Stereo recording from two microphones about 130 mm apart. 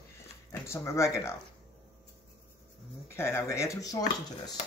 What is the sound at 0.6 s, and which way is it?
Speech, 20° left (ahead or behind).